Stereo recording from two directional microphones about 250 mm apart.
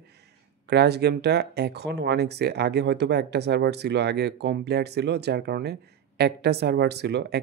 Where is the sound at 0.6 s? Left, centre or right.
Right.